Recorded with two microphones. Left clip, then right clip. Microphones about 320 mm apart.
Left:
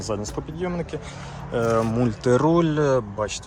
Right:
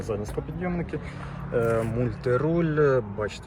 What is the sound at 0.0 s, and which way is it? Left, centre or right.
Speech, centre.